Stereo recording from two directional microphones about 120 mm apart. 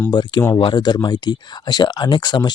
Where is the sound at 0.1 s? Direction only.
35° left (ahead or behind).